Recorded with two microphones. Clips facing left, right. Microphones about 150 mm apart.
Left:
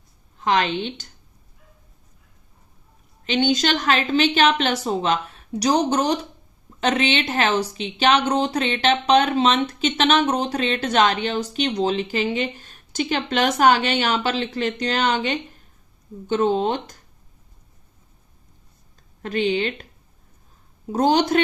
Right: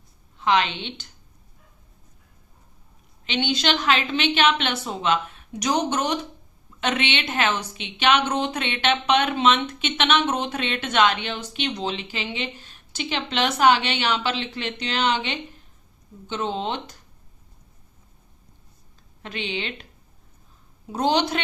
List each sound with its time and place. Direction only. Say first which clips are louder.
0.3 s speech: left 1 dB; 45° left (ahead or behind)
3.2 s a woman's voice: left 4 dB; 45° left (ahead or behind)
19.2 s speech: left 9 dB; 45° left (ahead or behind)
20.9 s speech: left 4 dB; 45° left (ahead or behind)